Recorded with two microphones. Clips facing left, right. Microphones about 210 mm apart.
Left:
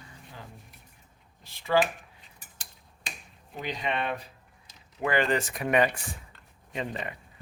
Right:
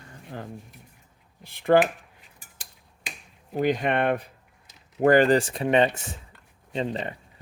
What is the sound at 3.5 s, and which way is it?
Speech, 50° right (ahead or behind).